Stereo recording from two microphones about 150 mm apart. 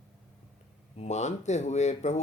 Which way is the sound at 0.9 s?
50° left (ahead or behind).